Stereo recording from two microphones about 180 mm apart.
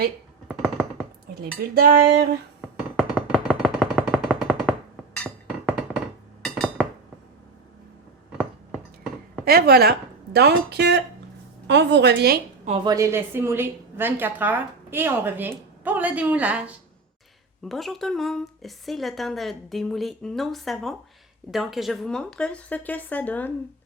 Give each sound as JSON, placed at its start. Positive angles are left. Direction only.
{"t": 0.4, "sound": "a sound", "side_deg": 0}
{"t": 1.4, "sound": "cutlery", "side_deg": -55}
{"t": 2.6, "sound": "music", "side_deg": 0}
{"t": 3.5, "sound": "a sound", "side_deg": 5}
{"t": 5.1, "sound": "chink", "side_deg": 5}
{"t": 9.4, "sound": "cutlery", "side_deg": -60}
{"t": 10.3, "sound": "speech", "side_deg": -65}
{"t": 12.6, "sound": "a woman's voice", "side_deg": -35}
{"t": 12.9, "sound": "a woman's voice", "side_deg": -15}